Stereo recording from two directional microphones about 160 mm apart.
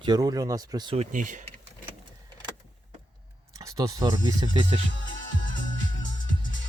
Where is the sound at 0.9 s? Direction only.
50° right (ahead or behind).